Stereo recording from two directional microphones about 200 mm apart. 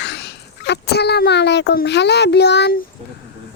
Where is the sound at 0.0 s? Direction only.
60° left (ahead or behind).